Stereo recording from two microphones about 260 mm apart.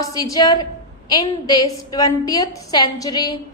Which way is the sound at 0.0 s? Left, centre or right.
Centre.